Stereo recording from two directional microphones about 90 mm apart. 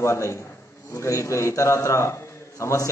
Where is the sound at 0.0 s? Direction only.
30° left (ahead or behind).